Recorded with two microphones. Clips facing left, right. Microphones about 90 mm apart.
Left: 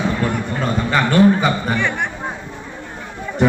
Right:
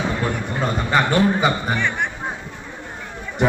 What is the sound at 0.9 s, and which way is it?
Mantra, 15° right (ahead or behind).